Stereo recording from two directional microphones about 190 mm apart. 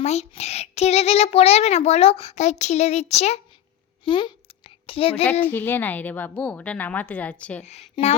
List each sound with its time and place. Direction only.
0.0 s a child's voice: 35° left (ahead or behind)
4.0 s a sound: 25° left (ahead or behind)
5.2 s a woman's voice: 10° left (ahead or behind)
7.6 s a child's voice: 35° left (ahead or behind)